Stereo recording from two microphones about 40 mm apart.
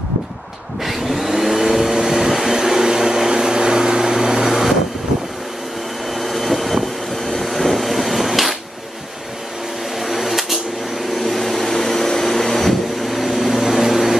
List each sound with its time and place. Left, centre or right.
0.8 s vacuum cleaner: centre
6.1 s vehicle: centre
9.9 s a sound: centre